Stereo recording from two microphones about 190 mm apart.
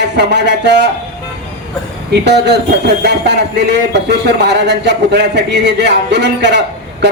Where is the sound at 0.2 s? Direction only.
65° right (ahead or behind).